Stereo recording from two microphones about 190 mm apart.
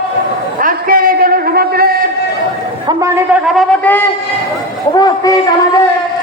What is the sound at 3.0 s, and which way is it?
Speech, 15° right (ahead or behind).